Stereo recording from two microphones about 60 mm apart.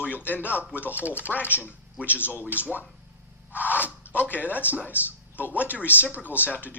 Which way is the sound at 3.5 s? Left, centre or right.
Left.